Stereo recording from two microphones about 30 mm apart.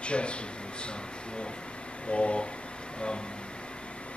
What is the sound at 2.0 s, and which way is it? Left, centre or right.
Speech, left.